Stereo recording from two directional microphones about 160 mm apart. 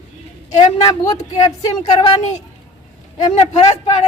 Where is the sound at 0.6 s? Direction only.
25° left (ahead or behind).